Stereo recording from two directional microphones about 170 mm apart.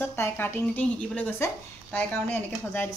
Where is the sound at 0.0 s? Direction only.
15° left (ahead or behind).